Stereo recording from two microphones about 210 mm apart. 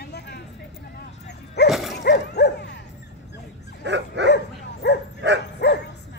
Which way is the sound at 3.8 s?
55° right (ahead or behind).